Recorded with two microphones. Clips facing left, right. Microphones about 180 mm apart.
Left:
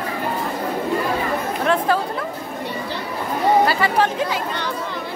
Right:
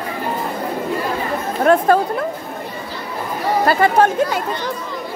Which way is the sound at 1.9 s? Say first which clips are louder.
Right 5 dB; 50° right (ahead or behind).